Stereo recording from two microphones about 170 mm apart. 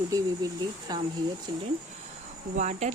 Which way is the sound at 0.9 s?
25° right (ahead or behind).